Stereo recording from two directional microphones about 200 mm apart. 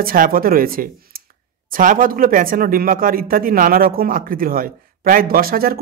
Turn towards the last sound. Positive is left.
turn(degrees=-50)  # may be behind; listen again after turning